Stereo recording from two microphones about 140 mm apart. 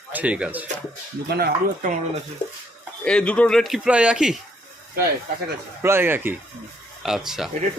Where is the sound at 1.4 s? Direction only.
80° right.